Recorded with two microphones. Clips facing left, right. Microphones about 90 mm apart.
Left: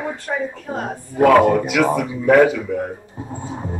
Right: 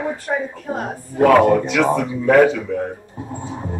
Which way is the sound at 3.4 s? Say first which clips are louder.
Even; centre (ahead or behind).